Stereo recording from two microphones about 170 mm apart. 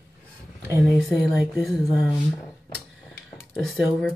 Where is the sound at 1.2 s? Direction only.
Centre (ahead or behind).